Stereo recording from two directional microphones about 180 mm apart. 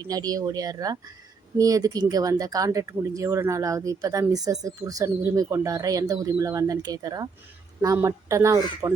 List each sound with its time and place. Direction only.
0.1 s speech: 20° right (ahead or behind)